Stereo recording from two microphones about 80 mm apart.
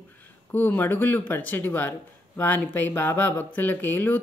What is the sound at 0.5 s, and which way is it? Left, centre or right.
Speech, left.